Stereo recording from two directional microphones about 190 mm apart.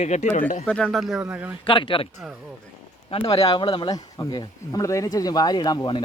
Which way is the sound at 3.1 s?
30° left (ahead or behind).